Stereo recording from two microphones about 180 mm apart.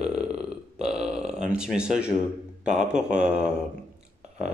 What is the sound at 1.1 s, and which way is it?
Speech, 5° right (ahead or behind).